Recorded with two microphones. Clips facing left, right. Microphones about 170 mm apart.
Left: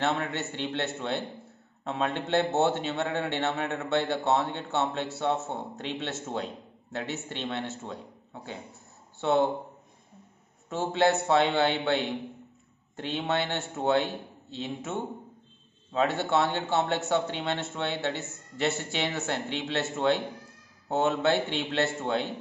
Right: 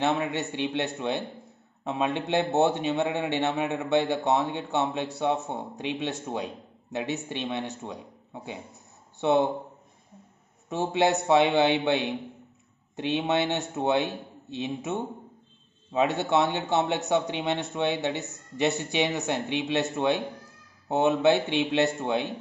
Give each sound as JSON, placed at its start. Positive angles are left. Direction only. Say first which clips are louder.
{"t": 0.0, "sound": "a man's voice", "louder": "right 3 dB", "side_deg": -15}
{"t": 10.7, "sound": "a man's voice", "louder": "right 1 dB", "side_deg": -15}